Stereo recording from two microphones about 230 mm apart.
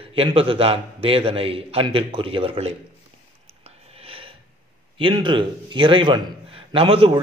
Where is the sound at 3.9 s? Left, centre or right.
Right.